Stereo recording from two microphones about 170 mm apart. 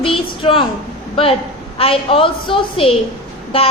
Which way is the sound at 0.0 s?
30° left (ahead or behind).